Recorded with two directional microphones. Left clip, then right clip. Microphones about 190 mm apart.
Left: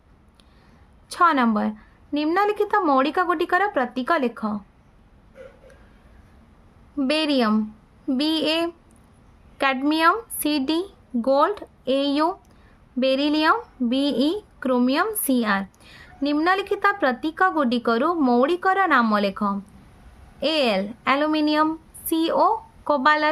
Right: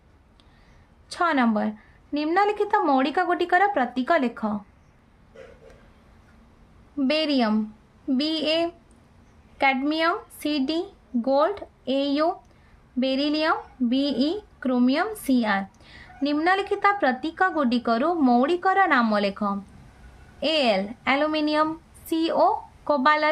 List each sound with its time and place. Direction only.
1.1 s speech: 25° left (ahead or behind)
7.0 s a woman's voice: 30° left (ahead or behind)